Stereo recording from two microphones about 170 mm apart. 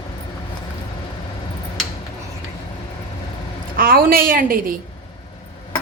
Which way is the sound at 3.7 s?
60° right (ahead or behind).